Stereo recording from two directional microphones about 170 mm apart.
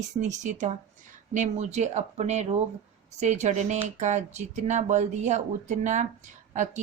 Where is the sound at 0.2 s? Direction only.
45° right (ahead or behind).